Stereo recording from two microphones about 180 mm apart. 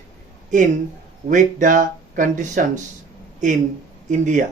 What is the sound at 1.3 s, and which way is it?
Speech, 45° right (ahead or behind).